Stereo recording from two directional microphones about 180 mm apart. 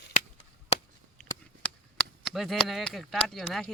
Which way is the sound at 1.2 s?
5° left (ahead or behind).